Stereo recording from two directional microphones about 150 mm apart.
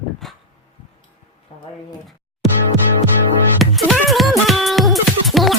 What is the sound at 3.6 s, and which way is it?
Music, centre (ahead or behind).